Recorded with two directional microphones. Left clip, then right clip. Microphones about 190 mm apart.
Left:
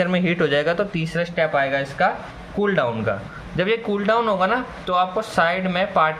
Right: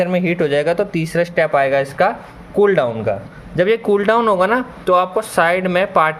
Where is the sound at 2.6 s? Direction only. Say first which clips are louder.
Right 7 dB; 40° right (ahead or behind).